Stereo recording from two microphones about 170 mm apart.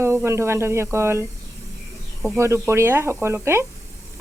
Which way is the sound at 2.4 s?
15° right (ahead or behind).